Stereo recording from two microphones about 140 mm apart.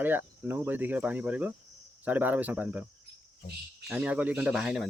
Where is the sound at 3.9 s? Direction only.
10° right (ahead or behind).